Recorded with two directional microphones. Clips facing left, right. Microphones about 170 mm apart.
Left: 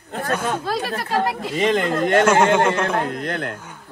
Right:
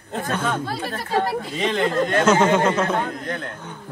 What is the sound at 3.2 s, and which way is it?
Speech, 70° left (ahead or behind).